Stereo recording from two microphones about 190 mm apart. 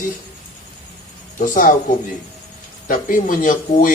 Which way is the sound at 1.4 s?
45° left (ahead or behind).